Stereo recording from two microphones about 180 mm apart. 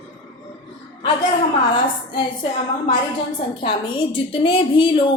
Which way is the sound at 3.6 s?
25° left (ahead or behind).